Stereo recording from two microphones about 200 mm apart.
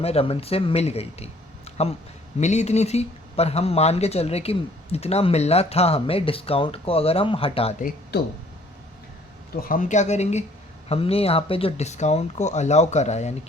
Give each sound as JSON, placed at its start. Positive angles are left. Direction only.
{"t": 0.0, "sound": "speech", "side_deg": 30}
{"t": 8.1, "sound": "speech", "side_deg": 55}
{"t": 9.6, "sound": "speech", "side_deg": 40}